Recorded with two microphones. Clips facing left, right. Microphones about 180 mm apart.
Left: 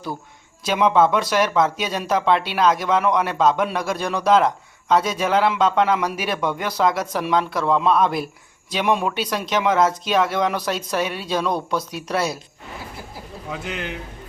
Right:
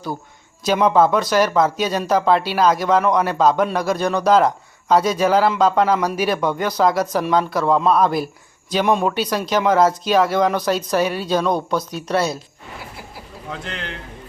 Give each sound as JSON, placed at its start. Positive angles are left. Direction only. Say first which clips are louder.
{"t": 0.6, "sound": "speech", "louder": "right 2 dB", "side_deg": 0}
{"t": 13.5, "sound": "speech", "louder": "left 1 dB", "side_deg": 10}